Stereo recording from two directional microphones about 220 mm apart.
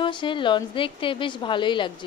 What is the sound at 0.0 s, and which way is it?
A woman's voice, 20° left (ahead or behind).